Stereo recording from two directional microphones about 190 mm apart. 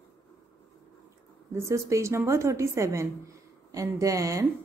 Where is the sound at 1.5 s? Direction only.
15° right (ahead or behind).